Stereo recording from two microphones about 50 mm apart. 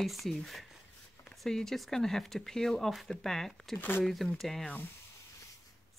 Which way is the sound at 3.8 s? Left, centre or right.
Left.